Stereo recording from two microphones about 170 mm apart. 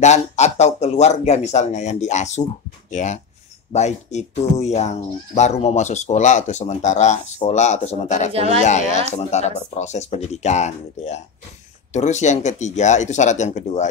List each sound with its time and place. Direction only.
0.0 s speech: 40° left (ahead or behind)
8.3 s speech: 35° right (ahead or behind)
8.5 s speech: 45° left (ahead or behind)